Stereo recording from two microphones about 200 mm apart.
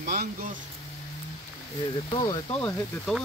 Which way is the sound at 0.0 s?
55° right (ahead or behind).